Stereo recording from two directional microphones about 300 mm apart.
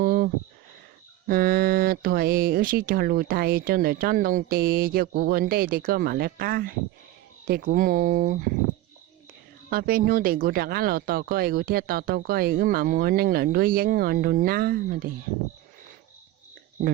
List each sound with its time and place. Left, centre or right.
0.0 s a sound: right
1.3 s speech: right
9.6 s speech: right